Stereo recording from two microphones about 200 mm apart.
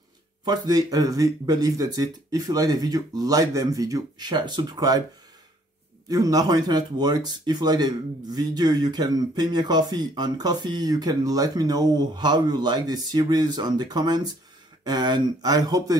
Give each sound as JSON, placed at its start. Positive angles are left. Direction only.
{"t": 0.5, "sound": "speech", "side_deg": -20}
{"t": 6.0, "sound": "speech", "side_deg": -20}